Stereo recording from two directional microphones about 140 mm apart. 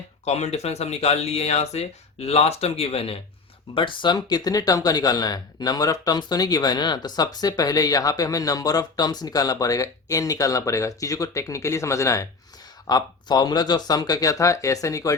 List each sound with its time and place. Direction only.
0.3 s speech: 50° left (ahead or behind); by 15.1 s 25° left (ahead or behind)